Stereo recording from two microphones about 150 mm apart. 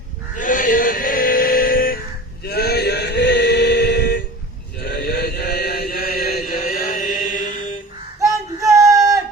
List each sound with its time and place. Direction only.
0.3 s chant: 60° left (ahead or behind)
2.4 s male singing: 90° left
4.8 s chant: 90° left; by 7.8 s 55° left (ahead or behind)
8.2 s a sound: 20° right (ahead or behind)